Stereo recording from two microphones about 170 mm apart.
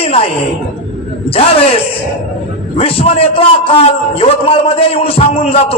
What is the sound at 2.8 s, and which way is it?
A man's voice, 35° left (ahead or behind).